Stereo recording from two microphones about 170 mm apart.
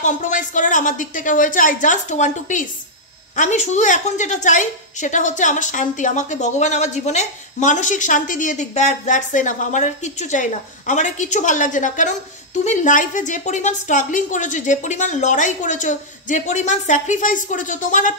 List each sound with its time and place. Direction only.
0.0 s a woman's voice: 50° left (ahead or behind)